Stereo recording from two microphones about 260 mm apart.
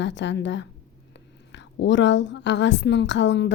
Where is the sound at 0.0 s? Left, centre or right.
Left.